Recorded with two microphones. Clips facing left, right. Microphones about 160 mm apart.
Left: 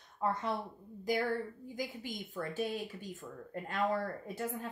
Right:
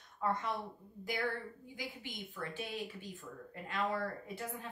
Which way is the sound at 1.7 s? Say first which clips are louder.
Left 6 dB; 40° left (ahead or behind).